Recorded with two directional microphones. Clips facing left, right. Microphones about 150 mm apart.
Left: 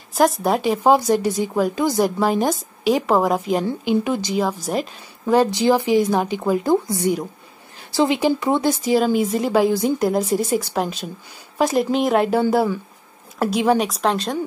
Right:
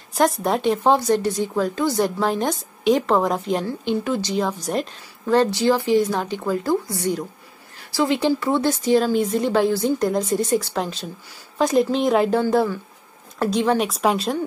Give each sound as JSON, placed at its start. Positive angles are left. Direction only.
{"t": 0.1, "sound": "a woman's voice", "side_deg": 0}